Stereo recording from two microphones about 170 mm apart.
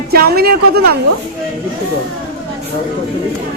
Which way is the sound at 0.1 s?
65° right (ahead or behind).